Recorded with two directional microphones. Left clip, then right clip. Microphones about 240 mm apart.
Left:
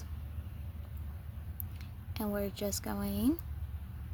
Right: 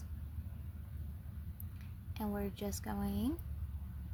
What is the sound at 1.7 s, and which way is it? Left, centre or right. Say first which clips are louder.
Speech: left 5 dB; left.